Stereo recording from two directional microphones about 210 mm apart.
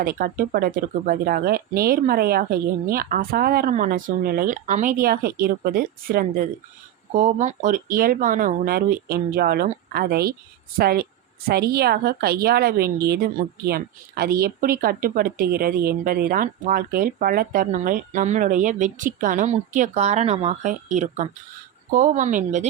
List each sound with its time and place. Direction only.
0.0 s a woman's voice: 40° right (ahead or behind)